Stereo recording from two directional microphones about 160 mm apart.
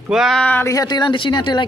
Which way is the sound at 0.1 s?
Centre (ahead or behind).